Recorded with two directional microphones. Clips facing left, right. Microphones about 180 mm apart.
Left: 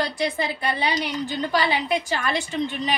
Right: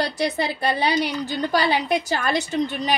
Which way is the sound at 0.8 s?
40° right (ahead or behind).